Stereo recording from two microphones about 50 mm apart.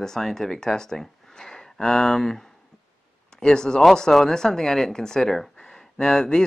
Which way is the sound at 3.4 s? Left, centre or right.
Centre.